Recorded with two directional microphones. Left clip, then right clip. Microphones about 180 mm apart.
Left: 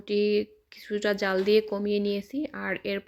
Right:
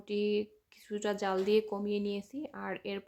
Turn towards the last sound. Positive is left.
turn(degrees=15)  # may be behind; listen again after turning